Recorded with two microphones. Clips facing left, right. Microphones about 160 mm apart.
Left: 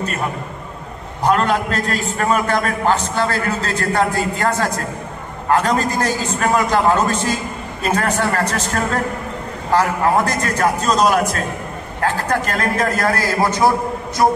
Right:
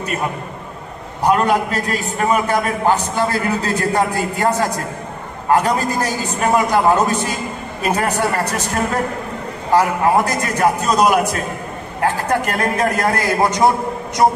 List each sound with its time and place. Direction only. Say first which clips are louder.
1.2 s a man's voice: right 1 dB; 10° right (ahead or behind)
9.8 s a man's voice: right 1 dB; 15° right (ahead or behind)